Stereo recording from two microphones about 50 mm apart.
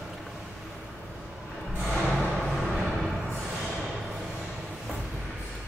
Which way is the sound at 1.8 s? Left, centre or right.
Centre.